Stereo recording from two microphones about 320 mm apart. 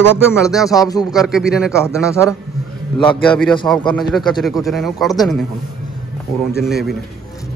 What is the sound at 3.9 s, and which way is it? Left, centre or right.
Speech, centre.